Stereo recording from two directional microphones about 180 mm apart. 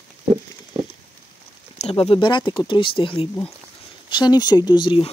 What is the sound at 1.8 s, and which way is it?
Speech, 30° left (ahead or behind).